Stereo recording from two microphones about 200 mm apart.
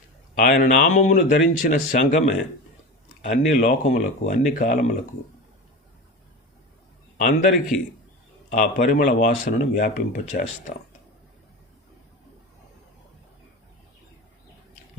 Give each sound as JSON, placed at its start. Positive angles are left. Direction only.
{"t": 0.3, "sound": "speech", "side_deg": 40}
{"t": 7.2, "sound": "a man's voice", "side_deg": 40}